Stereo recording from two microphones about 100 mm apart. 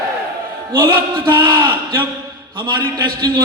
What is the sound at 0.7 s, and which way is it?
A man's voice, 55° right (ahead or behind).